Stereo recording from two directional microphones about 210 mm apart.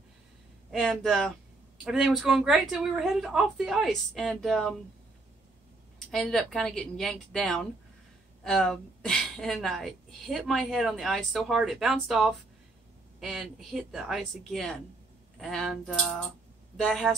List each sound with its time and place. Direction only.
0.7 s a woman's voice: centre (ahead or behind)
6.1 s a woman's voice: centre (ahead or behind)